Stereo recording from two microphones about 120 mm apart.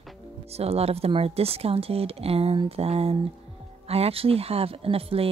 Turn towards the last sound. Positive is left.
turn(degrees=-50)  # may be behind; listen again after turning